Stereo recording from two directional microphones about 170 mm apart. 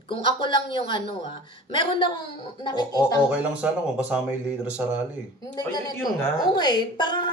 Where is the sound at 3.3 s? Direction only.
5° right (ahead or behind).